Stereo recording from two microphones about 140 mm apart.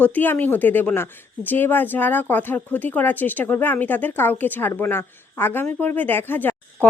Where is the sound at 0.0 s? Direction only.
10° left (ahead or behind).